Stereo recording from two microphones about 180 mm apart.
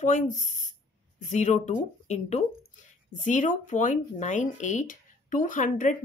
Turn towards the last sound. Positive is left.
turn(degrees=45)  # may be behind; listen again after turning